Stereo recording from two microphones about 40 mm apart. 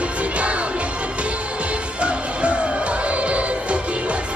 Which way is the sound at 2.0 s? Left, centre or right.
Right.